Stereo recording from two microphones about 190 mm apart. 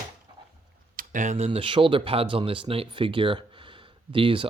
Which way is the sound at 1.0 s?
40° right (ahead or behind).